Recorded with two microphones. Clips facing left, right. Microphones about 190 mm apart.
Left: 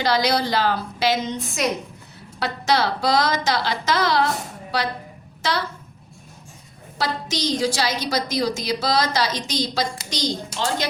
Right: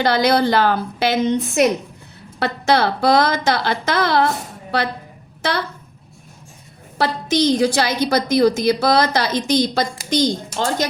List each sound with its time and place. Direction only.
0.0 s a woman's voice: 55° right (ahead or behind)
7.0 s a woman's voice: 55° right (ahead or behind)